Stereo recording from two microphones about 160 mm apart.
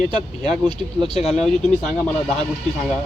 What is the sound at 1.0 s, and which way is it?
Speech, 35° left (ahead or behind).